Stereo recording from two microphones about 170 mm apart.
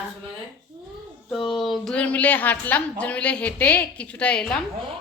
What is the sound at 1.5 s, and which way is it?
A woman's voice, centre (ahead or behind).